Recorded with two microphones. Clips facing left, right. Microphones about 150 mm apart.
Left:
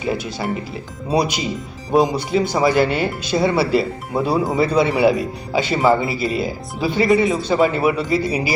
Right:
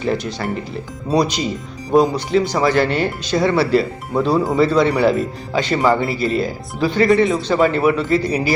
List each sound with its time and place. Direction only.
0.0 s speech: 5° left (ahead or behind)